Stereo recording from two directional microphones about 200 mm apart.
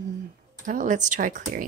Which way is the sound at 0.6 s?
40° right (ahead or behind).